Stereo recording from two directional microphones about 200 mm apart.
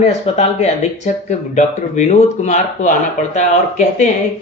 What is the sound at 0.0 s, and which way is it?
Speech, 35° left (ahead or behind).